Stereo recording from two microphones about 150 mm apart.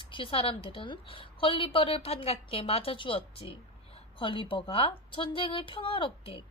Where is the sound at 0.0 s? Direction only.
35° left (ahead or behind).